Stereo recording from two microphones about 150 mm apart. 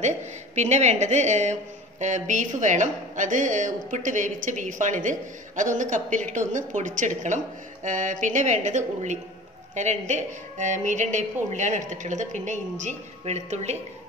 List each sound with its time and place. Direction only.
0.6 s a woman's voice: 50° right (ahead or behind)